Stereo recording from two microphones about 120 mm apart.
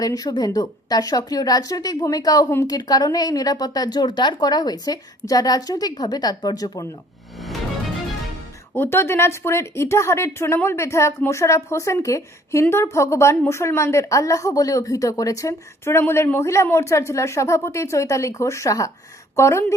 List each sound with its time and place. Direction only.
0.0 s a woman's voice: 30° left (ahead or behind)
8.7 s a woman's voice: 20° left (ahead or behind)